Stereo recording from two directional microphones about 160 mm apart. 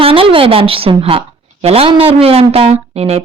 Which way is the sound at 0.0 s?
35° right (ahead or behind).